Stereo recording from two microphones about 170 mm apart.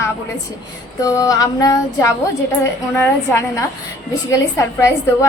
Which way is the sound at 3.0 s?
15° left (ahead or behind).